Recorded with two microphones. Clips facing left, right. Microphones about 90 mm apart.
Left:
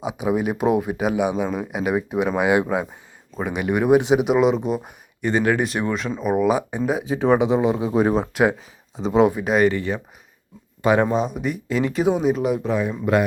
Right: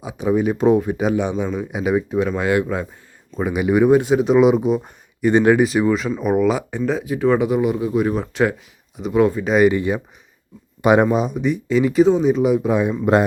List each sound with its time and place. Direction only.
0.0 s speech: 15° left (ahead or behind)
3.3 s speech: 5° right (ahead or behind)
3.8 s speech: 15° left (ahead or behind)
4.4 s speech: 5° right (ahead or behind)
5.3 s speech: 20° right (ahead or behind)
5.5 s speech: centre (ahead or behind)
6.6 s speech: 15° left (ahead or behind)
9.2 s speech: 15° left (ahead or behind)
9.6 s speech: 15° right (ahead or behind)
12.6 s speech: 20° right (ahead or behind)